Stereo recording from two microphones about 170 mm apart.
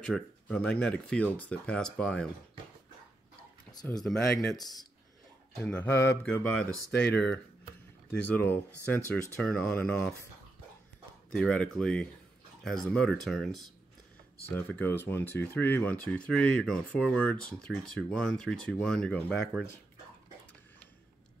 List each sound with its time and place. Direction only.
0.1 s speech: 5° left (ahead or behind)
3.7 s speech: 25° left (ahead or behind)
4.0 s speech: 5° left (ahead or behind)
5.6 s speech: 10° left (ahead or behind)
8.1 s speech: 10° left (ahead or behind)
11.3 s speech: 5° left (ahead or behind)
14.5 s speech: 10° left (ahead or behind)